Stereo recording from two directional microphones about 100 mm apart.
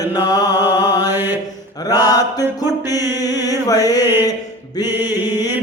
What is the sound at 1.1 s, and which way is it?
Mantra, 20° right (ahead or behind).